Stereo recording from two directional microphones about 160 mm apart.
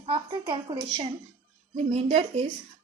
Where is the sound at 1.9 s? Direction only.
40° right (ahead or behind).